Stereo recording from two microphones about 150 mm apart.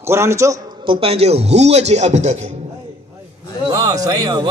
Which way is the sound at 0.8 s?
35° right (ahead or behind).